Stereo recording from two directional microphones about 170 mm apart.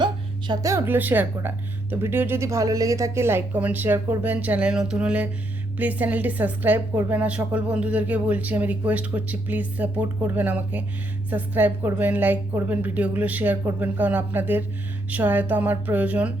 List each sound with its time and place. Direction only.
0.0 s a woman's voice: 25° right (ahead or behind); by 16.3 s 10° right (ahead or behind)